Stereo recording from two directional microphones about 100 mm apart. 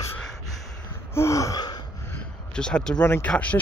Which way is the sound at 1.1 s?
30° left (ahead or behind).